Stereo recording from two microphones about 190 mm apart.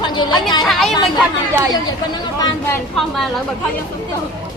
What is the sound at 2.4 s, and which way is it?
Speech, 10° left (ahead or behind).